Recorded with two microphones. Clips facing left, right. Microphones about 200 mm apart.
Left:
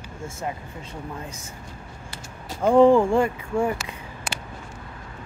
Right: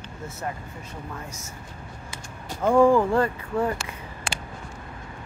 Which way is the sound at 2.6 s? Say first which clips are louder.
Left 3 dB; 20° left (ahead or behind).